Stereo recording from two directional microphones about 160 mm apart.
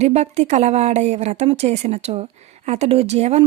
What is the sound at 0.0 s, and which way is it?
Speech, 40° right (ahead or behind).